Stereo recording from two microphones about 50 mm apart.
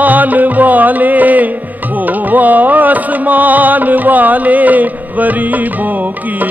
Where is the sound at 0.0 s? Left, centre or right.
Right.